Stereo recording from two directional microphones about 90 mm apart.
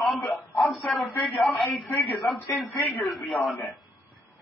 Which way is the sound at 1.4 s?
Centre (ahead or behind).